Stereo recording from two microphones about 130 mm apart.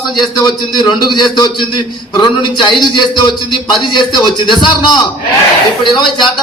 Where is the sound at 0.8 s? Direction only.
35° left (ahead or behind).